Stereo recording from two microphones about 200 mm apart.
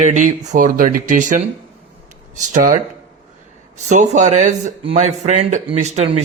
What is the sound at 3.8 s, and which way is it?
Speech, 35° right (ahead or behind).